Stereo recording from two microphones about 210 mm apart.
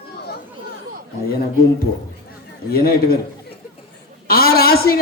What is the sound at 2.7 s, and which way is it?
Speech, 45° left (ahead or behind).